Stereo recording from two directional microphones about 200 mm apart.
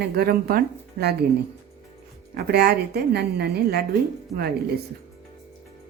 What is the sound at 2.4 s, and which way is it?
A man's voice, 50° right (ahead or behind).